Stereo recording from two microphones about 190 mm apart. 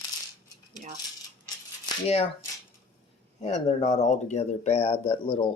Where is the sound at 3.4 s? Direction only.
35° left (ahead or behind).